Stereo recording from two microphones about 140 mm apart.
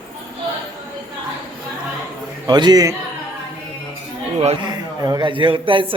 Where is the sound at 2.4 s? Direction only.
30° right (ahead or behind).